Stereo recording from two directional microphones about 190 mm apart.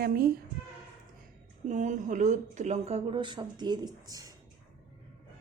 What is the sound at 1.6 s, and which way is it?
Speech, 40° right (ahead or behind).